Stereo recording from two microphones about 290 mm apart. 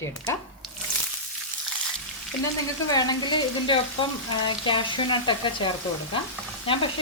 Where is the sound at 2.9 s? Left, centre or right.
Centre.